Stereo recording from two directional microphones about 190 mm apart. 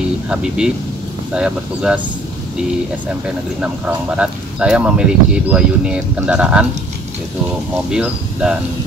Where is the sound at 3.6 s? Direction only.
5° right (ahead or behind).